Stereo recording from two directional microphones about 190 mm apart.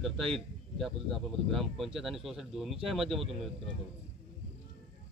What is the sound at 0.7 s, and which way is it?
Speech, centre (ahead or behind).